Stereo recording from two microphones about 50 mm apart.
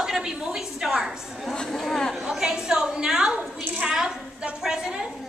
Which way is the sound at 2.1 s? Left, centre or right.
Centre.